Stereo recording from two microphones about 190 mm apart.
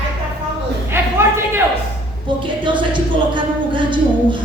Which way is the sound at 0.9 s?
10° right (ahead or behind).